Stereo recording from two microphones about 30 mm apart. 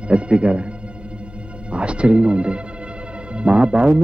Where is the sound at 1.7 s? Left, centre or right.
Right.